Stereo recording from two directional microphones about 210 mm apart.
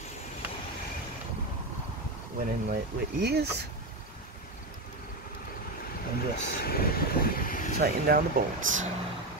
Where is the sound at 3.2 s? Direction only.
50° right (ahead or behind).